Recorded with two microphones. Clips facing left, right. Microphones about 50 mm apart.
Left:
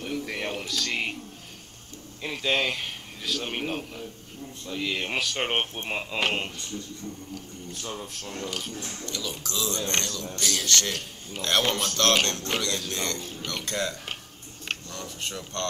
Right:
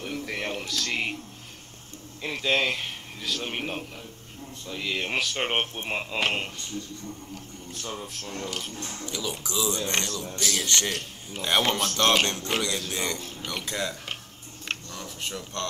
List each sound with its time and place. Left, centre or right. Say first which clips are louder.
0.0 s speech: left 1 dB; centre
2.2 s speech: right 1 dB; centre
7.7 s speech: right 1 dB; centre
9.0 s speech: right 3 dB; centre